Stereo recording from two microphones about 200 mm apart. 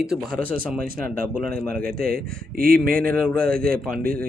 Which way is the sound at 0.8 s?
45° right (ahead or behind).